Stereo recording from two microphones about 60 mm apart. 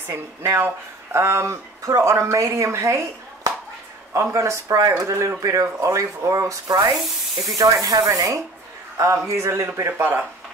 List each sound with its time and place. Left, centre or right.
0.0 s speech: right
4.1 s a man's voice: right
9.9 s speech: right